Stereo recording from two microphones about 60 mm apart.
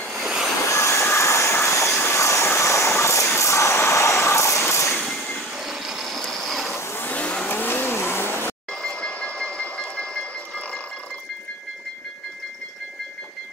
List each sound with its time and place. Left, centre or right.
0.1 s vehicle: centre
0.7 s vehicle: left
5.0 s train: centre
6.2 s ratchet: centre
6.7 s vehicle: left
7.1 s vehicle: left
8.8 s train: centre